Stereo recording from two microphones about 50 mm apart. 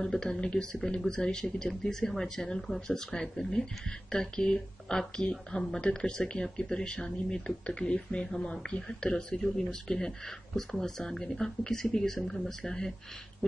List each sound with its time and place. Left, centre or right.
0.0 s speech: centre